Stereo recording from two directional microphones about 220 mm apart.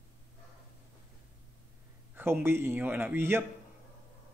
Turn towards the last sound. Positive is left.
turn(degrees=-10)  # may be behind; listen again after turning